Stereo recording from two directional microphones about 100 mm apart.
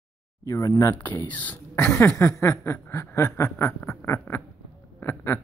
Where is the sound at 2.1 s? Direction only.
30° left (ahead or behind).